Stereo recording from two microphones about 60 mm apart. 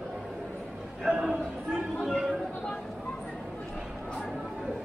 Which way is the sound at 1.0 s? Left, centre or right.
Centre.